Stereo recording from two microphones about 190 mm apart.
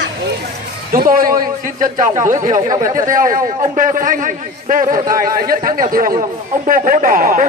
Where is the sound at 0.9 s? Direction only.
50° right (ahead or behind).